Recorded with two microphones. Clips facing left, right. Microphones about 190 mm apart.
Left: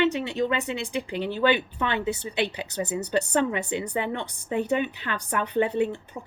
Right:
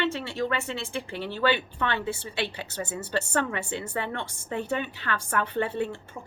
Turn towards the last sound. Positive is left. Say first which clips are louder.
# left 4 dB
turn(degrees=20)  # may be behind; listen again after turning